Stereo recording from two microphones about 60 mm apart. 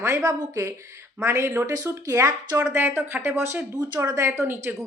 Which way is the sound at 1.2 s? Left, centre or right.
Right.